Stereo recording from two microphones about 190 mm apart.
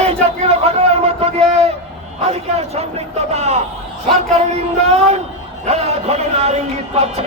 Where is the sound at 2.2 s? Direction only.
35° right (ahead or behind).